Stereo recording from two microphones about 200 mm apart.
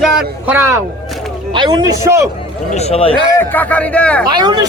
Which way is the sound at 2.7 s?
30° left (ahead or behind).